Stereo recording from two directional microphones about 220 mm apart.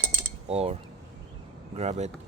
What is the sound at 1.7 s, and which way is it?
Speech, 30° right (ahead or behind).